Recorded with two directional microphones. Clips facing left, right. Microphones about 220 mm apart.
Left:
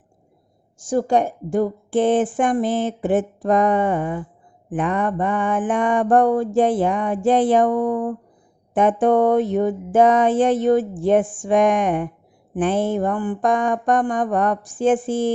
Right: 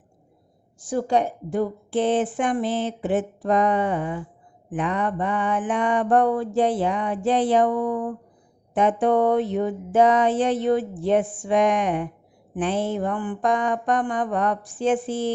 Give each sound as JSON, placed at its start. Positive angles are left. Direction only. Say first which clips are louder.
{"t": 0.8, "sound": "a woman's voice", "louder": "left 3 dB", "side_deg": 45}